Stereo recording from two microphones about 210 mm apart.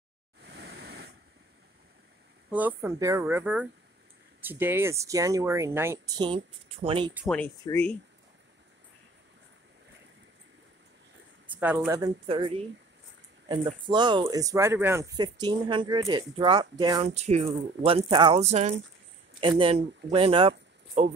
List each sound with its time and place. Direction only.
0.4 s a sound: 55° right (ahead or behind)
2.5 s speech: 10° right (ahead or behind)
7.2 s speech: 5° left (ahead or behind)
11.4 s speech: 10° right (ahead or behind)
12.3 s speech: 25° right (ahead or behind)
17.1 s speech: 30° right (ahead or behind)